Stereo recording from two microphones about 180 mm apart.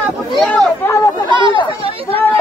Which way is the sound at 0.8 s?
15° left (ahead or behind).